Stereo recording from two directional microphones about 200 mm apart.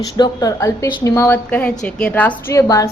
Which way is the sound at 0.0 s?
20° left (ahead or behind).